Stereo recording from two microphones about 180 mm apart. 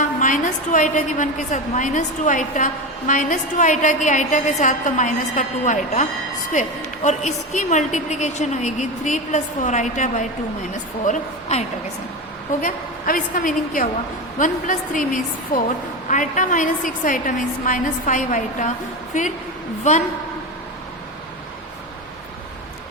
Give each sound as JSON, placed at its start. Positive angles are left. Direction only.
{"t": 0.2, "sound": "a woman's voice", "side_deg": 45}
{"t": 12.6, "sound": "a woman's voice", "side_deg": 50}